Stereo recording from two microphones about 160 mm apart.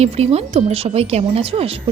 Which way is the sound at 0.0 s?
40° right (ahead or behind).